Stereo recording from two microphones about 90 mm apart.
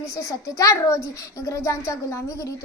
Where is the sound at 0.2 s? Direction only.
35° left (ahead or behind).